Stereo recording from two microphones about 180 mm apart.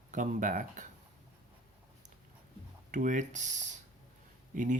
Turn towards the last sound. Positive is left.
turn(degrees=-45)  # may be behind; listen again after turning